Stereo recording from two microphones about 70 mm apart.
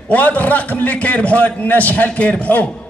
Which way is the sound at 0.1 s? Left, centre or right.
Left.